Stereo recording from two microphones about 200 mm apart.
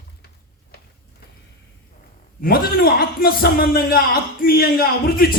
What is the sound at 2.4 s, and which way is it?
A man's voice, 50° left (ahead or behind).